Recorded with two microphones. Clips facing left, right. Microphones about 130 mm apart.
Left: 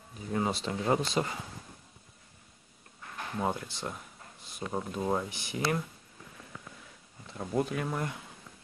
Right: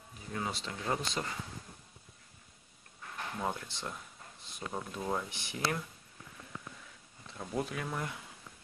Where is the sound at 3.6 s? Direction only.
5° left (ahead or behind).